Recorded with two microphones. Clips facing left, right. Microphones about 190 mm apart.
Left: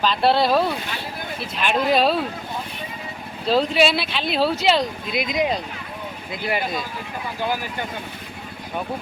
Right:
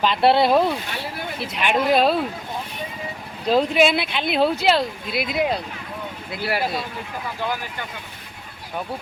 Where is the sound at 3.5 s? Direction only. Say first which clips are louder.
Right 1 dB; 15° right (ahead or behind).